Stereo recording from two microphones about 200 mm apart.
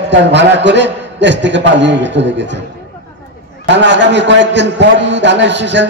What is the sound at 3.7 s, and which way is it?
A man's voice, 65° right (ahead or behind).